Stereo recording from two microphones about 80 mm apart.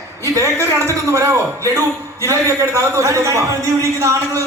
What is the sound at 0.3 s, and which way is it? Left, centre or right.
A man's voice, right.